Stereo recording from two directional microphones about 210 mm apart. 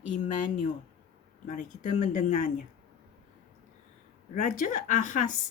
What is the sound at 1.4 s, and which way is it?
Speech, 40° left (ahead or behind).